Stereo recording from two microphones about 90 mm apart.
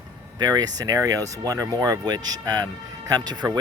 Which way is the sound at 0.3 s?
50° right (ahead or behind).